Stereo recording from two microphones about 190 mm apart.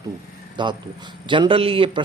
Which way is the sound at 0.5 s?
25° right (ahead or behind).